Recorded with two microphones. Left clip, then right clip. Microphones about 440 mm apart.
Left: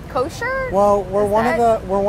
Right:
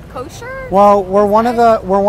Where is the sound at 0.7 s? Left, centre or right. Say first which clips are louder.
Right 8 dB; right.